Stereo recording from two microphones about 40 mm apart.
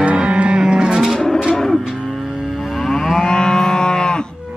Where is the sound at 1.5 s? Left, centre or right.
Centre.